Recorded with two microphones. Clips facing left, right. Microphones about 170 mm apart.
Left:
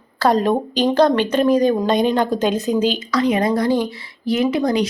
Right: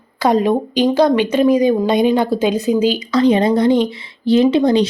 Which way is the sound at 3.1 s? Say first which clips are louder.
Right 5 dB; 25° right (ahead or behind).